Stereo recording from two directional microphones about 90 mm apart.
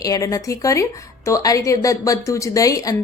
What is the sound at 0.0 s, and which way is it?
A woman's voice, 40° left (ahead or behind).